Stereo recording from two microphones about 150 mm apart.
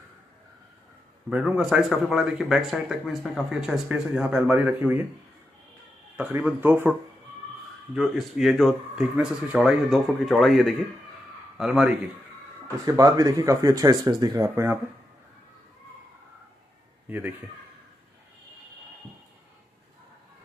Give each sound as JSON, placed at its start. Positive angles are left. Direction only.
{"t": 1.3, "sound": "speech", "side_deg": -10}
{"t": 6.1, "sound": "a man's voice", "side_deg": -10}
{"t": 12.8, "sound": "speech", "side_deg": -25}